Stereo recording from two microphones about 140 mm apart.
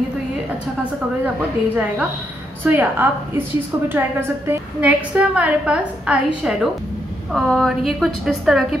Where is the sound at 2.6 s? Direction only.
15° right (ahead or behind).